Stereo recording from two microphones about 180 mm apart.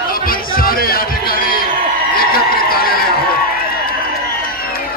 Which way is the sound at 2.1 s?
55° left (ahead or behind).